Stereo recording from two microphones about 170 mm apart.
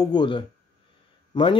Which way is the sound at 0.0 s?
25° left (ahead or behind).